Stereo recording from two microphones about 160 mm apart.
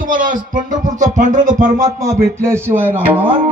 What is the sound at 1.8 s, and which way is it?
A man's voice, 25° right (ahead or behind).